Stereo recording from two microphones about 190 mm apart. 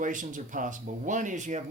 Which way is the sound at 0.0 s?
45° right (ahead or behind).